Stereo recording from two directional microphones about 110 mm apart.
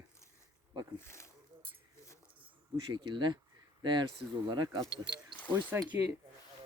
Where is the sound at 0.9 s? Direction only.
25° left (ahead or behind).